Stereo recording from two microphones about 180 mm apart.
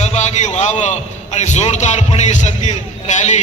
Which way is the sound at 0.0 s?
40° left (ahead or behind).